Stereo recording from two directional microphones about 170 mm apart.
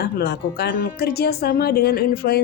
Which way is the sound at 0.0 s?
70° left (ahead or behind).